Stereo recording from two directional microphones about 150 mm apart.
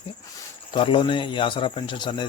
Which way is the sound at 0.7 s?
35° left (ahead or behind).